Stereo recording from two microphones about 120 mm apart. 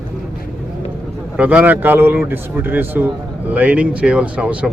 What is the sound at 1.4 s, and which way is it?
Speech, 10° right (ahead or behind).